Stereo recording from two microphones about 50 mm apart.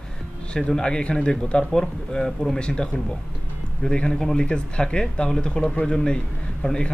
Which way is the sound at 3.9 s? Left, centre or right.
Centre.